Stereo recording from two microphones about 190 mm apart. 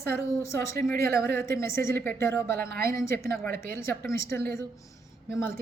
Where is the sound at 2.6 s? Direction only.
55° right (ahead or behind).